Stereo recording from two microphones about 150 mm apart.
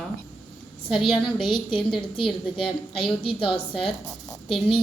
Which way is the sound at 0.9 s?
35° left (ahead or behind).